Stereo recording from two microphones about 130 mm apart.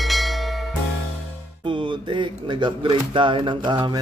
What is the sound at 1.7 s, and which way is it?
Speech, 40° right (ahead or behind).